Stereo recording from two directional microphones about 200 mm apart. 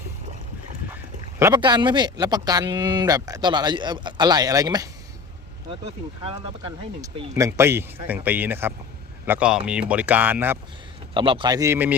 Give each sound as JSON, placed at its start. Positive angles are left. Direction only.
{"t": 1.4, "sound": "speech", "side_deg": -20}
{"t": 5.8, "sound": "speech", "side_deg": -30}
{"t": 7.0, "sound": "speech", "side_deg": -15}
{"t": 11.1, "sound": "speech", "side_deg": -25}